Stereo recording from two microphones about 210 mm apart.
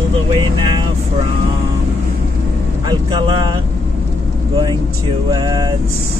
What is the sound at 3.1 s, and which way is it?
Speech, 20° right (ahead or behind).